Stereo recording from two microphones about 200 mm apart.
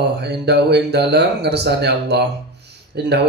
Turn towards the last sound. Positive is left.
turn(degrees=-55)  # may be behind; listen again after turning